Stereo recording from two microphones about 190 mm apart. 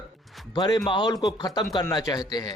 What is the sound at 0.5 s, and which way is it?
A man's voice, 25° left (ahead or behind).